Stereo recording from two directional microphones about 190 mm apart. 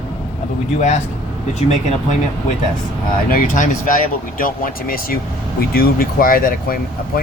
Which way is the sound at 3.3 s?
45° left (ahead or behind).